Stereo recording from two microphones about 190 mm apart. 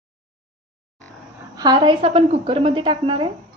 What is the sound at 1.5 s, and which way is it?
A woman's voice, 20° right (ahead or behind).